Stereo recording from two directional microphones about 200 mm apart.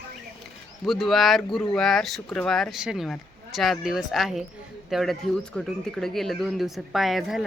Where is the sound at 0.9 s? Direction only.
Centre (ahead or behind).